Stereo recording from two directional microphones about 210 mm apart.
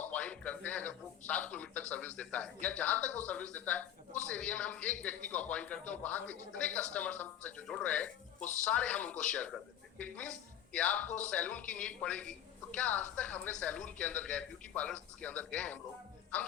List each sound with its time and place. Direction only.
0.0 s a man's voice: 5° left (ahead or behind)
8.4 s speech: 35° left (ahead or behind)
8.6 s a woman's voice: 5° left (ahead or behind)